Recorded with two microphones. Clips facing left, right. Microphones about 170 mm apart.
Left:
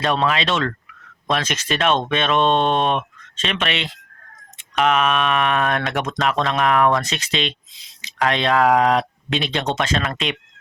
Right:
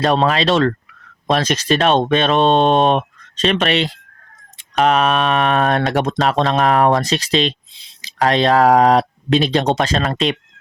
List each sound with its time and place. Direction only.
0.0 s speech: 35° right (ahead or behind)